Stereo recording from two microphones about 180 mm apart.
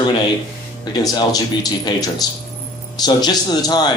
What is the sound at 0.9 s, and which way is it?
A man's voice, 20° left (ahead or behind).